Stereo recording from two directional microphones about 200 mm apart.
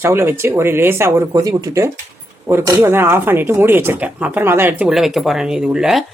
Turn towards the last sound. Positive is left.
turn(degrees=-5)  # may be behind; listen again after turning